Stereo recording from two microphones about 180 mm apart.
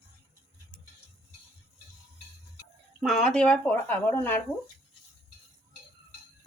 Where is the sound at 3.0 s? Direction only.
Centre (ahead or behind).